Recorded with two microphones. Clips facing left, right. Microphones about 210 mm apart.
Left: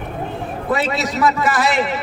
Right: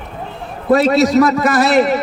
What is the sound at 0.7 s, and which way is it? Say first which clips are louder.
A man's voice: right 10 dB; 40° right (ahead or behind).